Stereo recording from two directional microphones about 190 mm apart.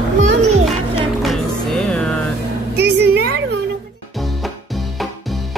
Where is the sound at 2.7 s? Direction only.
60° right (ahead or behind).